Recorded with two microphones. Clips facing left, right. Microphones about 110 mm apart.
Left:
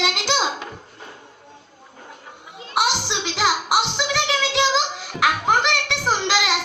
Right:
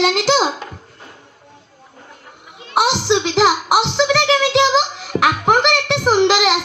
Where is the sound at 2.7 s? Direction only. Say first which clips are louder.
Right 6 dB; 25° right (ahead or behind).